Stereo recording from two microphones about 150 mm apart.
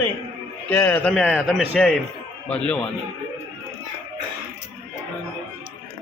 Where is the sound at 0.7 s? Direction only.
10° left (ahead or behind).